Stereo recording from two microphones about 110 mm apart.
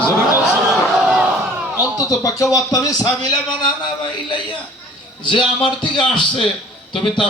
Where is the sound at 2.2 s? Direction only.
30° left (ahead or behind).